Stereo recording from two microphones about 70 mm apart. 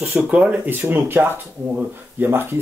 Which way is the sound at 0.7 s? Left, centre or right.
Right.